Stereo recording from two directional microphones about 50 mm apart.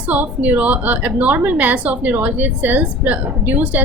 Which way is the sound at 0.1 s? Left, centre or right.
Right.